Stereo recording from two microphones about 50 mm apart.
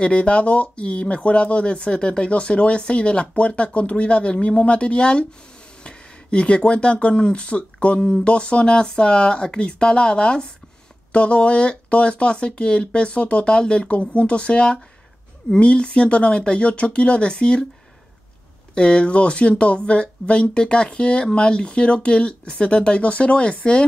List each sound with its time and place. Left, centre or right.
0.0 s speech: left
18.8 s speech: centre